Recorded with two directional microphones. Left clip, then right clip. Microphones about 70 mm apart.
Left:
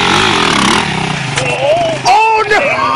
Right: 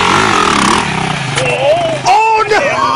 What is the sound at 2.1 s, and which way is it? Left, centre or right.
Vehicle, centre.